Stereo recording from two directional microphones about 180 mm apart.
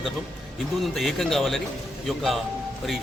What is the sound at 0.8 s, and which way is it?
Speech, centre (ahead or behind).